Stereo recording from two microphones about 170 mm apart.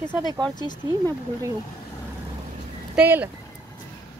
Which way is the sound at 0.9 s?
20° right (ahead or behind).